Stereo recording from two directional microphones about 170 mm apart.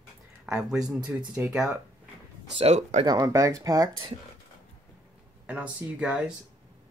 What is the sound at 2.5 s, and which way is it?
Speech, 40° right (ahead or behind).